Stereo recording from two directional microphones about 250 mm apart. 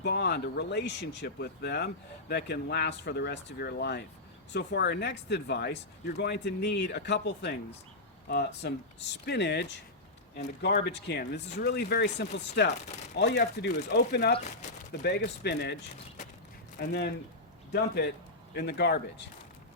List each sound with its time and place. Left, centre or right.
0.0 s speech: left
16.8 s a man's voice: left